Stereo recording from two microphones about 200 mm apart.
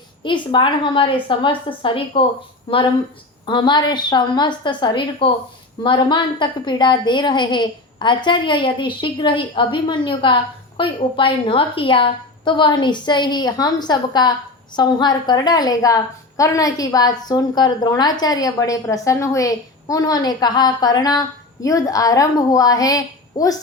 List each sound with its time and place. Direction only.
0.2 s a woman's voice: 25° left (ahead or behind)